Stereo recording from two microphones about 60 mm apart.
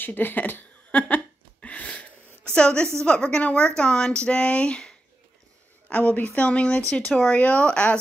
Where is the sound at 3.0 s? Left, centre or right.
Centre.